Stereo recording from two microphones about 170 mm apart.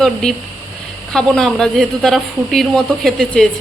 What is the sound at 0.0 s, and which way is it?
Speech, 5° left (ahead or behind).